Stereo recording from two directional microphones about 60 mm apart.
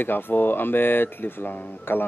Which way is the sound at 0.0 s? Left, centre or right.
Left.